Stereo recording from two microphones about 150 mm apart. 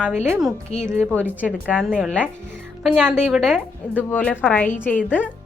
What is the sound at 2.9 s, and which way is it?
Speech, 15° right (ahead or behind).